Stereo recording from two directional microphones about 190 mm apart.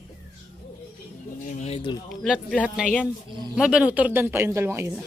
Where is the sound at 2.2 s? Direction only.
5° left (ahead or behind); by 5.0 s 15° right (ahead or behind).